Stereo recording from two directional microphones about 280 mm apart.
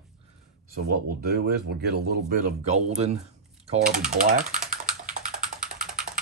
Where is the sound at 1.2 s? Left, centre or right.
Right.